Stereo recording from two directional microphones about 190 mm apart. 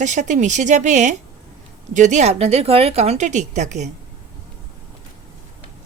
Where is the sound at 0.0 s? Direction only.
40° right (ahead or behind).